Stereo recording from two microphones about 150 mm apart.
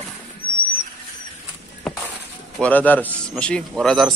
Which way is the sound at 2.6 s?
10° left (ahead or behind).